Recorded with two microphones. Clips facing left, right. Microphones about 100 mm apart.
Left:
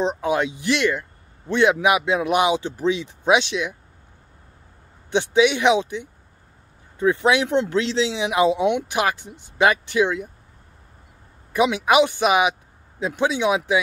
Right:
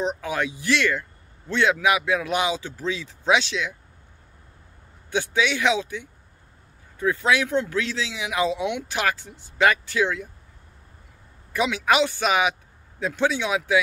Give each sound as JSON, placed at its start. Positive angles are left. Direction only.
{"t": 0.0, "sound": "speech", "side_deg": 20}
{"t": 5.1, "sound": "speech", "side_deg": 20}
{"t": 11.5, "sound": "speech", "side_deg": 20}